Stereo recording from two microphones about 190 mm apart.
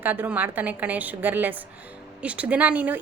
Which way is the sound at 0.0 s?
10° right (ahead or behind).